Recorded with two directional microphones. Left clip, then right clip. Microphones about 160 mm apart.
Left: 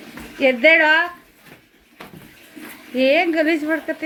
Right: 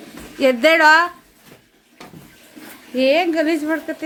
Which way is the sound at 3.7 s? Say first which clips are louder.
Left 1 dB; centre (ahead or behind).